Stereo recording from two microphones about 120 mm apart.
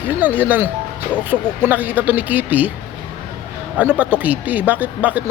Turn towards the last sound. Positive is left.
turn(degrees=-15)  # may be behind; listen again after turning